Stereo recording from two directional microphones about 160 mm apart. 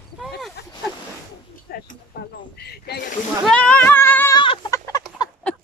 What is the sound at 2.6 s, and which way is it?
Snake, 90° left.